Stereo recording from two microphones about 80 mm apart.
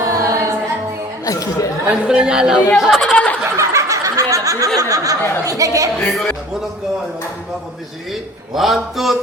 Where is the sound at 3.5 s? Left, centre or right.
Right.